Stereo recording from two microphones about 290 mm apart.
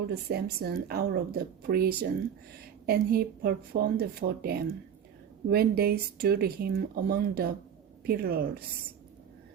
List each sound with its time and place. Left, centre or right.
0.1 s speech: right